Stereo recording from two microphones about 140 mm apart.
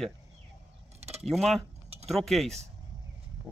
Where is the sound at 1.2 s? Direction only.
Centre (ahead or behind).